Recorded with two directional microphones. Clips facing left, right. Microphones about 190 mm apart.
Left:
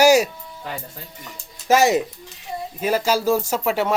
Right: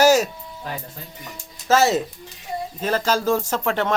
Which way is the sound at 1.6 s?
15° left (ahead or behind).